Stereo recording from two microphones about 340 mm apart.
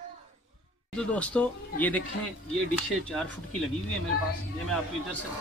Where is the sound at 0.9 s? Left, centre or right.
Centre.